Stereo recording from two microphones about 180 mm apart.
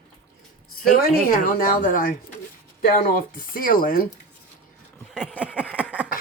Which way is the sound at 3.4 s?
50° left (ahead or behind).